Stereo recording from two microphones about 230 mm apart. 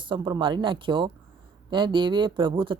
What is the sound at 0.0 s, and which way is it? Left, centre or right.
Speech, right.